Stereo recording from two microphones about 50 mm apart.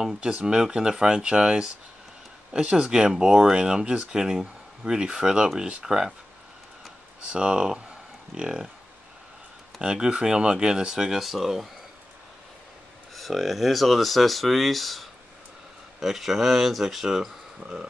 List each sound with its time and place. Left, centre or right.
0.0 s speech: centre
7.3 s speech: centre
9.8 s speech: centre
13.1 s speech: centre